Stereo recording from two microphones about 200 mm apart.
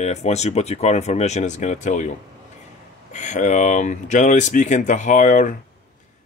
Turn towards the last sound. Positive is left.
turn(degrees=40)  # may be behind; listen again after turning